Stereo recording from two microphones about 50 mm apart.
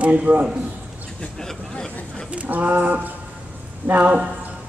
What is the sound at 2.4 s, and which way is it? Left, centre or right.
Speech, right.